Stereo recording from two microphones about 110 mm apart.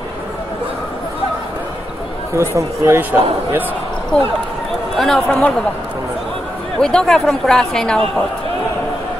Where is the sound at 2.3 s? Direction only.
25° right (ahead or behind).